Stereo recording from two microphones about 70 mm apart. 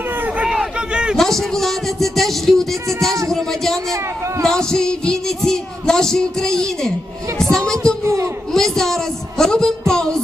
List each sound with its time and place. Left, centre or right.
0.4 s a sound: centre
1.1 s a man's voice: centre
3.2 s a sound: centre
4.4 s music: centre
8.0 s speech: right
8.5 s music: centre